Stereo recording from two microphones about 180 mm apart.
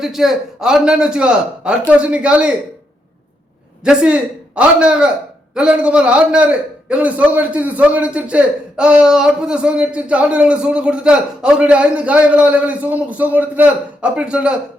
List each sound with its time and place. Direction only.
0.0 s a man's voice: centre (ahead or behind)
3.8 s a man's voice: 5° right (ahead or behind)